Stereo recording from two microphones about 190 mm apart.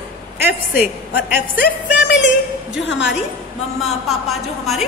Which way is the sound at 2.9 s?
70° left (ahead or behind).